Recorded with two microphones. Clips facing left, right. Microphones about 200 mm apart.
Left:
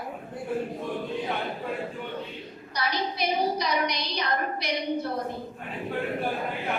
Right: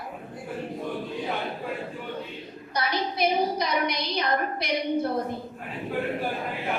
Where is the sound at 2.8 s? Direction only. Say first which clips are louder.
Right 2 dB; 50° right (ahead or behind).